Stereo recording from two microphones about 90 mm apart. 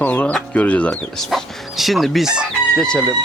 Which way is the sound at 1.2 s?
Centre (ahead or behind).